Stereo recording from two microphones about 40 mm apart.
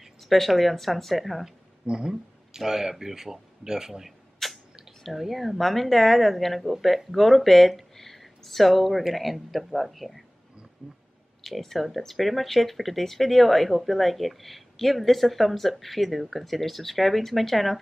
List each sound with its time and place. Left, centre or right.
0.2 s speech: centre
1.9 s speech: centre
4.4 s a sound: centre
5.0 s speech: centre
10.8 s speech: right
11.4 s speech: centre